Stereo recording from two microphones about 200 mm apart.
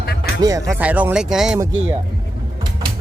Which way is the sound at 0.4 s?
15° right (ahead or behind).